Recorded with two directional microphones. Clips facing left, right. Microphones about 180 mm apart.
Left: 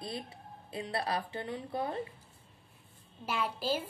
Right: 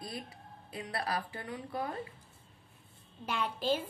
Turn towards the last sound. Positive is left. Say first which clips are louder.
# right 1 dB
turn(degrees=5)  # may be behind; listen again after turning